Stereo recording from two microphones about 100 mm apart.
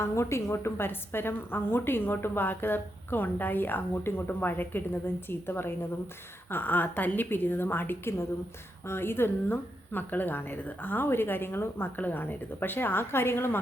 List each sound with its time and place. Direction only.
0.0 s a woman's voice: 25° left (ahead or behind)